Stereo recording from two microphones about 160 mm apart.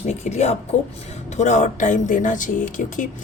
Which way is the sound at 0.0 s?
45° left (ahead or behind).